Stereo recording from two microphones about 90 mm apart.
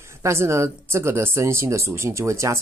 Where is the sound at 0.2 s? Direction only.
30° right (ahead or behind).